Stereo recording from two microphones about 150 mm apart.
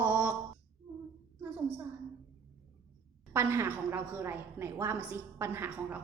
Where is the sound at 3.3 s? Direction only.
15° right (ahead or behind).